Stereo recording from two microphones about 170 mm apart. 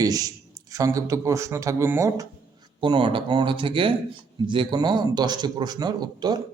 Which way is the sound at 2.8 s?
30° right (ahead or behind).